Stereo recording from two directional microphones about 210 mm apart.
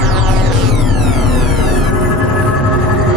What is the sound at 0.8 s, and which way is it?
Music, centre (ahead or behind).